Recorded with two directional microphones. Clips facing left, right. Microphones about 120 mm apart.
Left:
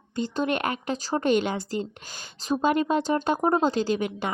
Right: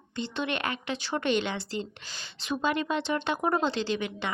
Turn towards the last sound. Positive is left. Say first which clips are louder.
# left 5 dB
turn(degrees=45)  # may be behind; listen again after turning